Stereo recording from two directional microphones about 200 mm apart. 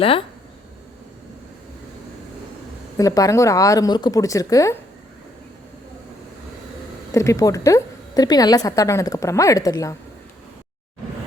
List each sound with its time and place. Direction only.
3.0 s a woman's voice: 15° left (ahead or behind)
7.1 s a woman's voice: 15° left (ahead or behind)